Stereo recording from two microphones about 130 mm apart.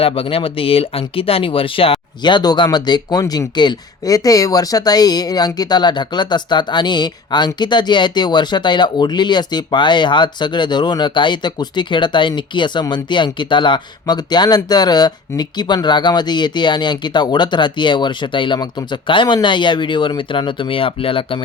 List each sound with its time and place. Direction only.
0.0 s speech: 45° left (ahead or behind)